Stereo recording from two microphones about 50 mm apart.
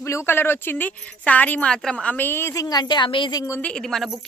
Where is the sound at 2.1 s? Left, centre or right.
Left.